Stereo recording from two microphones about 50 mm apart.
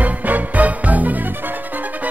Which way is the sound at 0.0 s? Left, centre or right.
Right.